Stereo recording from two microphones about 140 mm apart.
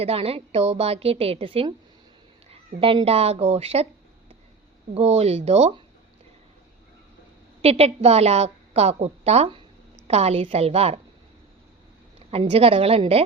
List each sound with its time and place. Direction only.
0.0 s a woman's voice: 45° right (ahead or behind)
2.8 s a woman's voice: 40° right (ahead or behind)
4.9 s a woman's voice: 50° right (ahead or behind)
7.6 s a woman's voice: 45° right (ahead or behind)
12.3 s a woman's voice: 45° right (ahead or behind)